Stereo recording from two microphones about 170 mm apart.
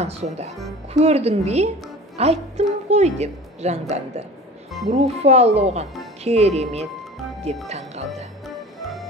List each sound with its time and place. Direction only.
0.0 s a woman's voice: 40° right (ahead or behind)